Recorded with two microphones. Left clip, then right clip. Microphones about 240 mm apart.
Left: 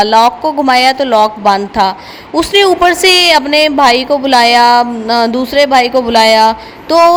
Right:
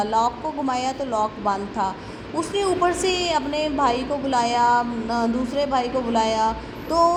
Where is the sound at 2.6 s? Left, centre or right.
Left.